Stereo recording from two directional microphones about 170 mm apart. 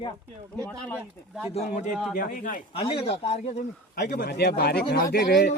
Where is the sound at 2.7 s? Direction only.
30° left (ahead or behind).